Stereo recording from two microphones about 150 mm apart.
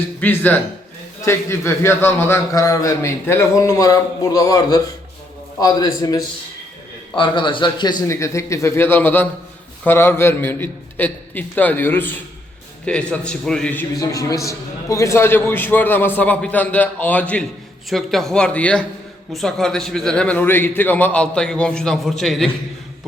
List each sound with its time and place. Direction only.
0.2 s a man's voice: 10° left (ahead or behind)
7.2 s a man's voice: 35° left (ahead or behind)
8.0 s a man's voice: 20° left (ahead or behind)
14.0 s a man's voice: 20° left (ahead or behind); by 22.4 s centre (ahead or behind)